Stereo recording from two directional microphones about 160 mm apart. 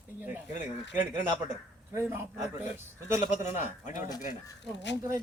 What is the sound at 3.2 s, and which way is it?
Speech, 50° left (ahead or behind).